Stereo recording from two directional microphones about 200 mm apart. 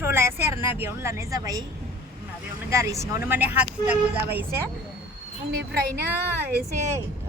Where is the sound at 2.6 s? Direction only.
15° right (ahead or behind).